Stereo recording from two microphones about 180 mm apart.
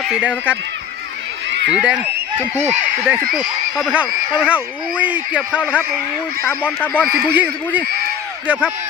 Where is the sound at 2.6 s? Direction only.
40° right (ahead or behind).